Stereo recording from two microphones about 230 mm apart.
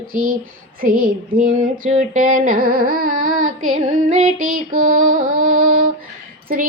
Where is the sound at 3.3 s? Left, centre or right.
Right.